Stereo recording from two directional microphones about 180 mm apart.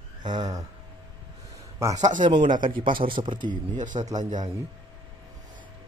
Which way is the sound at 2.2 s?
25° right (ahead or behind).